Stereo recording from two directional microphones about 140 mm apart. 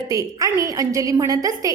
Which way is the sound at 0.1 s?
25° right (ahead or behind).